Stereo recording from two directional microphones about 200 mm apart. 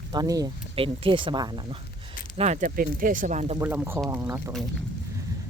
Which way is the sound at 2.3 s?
35° right (ahead or behind).